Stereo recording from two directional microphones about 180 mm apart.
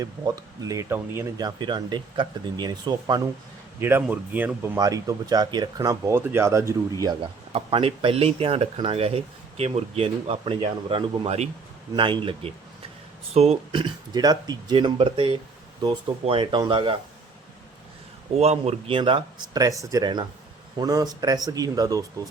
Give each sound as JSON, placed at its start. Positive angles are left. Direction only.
{"t": 0.0, "sound": "speech", "side_deg": -20}
{"t": 3.8, "sound": "speech", "side_deg": -10}
{"t": 7.5, "sound": "speech", "side_deg": -30}
{"t": 18.3, "sound": "speech", "side_deg": -35}